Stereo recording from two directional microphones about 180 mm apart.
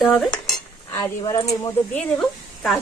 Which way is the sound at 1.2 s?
20° left (ahead or behind).